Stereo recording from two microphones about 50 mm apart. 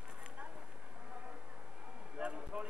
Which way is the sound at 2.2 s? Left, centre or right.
Right.